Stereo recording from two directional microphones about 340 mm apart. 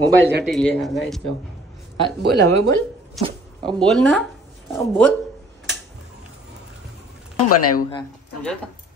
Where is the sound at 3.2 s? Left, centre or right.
Centre.